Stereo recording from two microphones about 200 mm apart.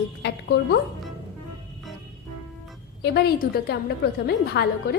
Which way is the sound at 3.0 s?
55° left (ahead or behind).